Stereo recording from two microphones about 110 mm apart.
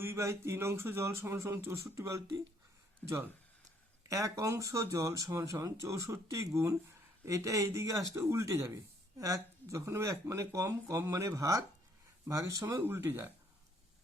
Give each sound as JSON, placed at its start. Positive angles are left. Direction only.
{"t": 0.0, "sound": "speech", "side_deg": -25}
{"t": 4.1, "sound": "speech", "side_deg": -30}
{"t": 12.6, "sound": "speech", "side_deg": -20}